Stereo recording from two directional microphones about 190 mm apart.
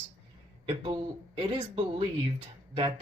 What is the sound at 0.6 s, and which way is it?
Speech, 30° right (ahead or behind).